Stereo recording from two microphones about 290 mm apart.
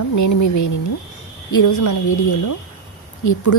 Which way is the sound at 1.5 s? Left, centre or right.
Left.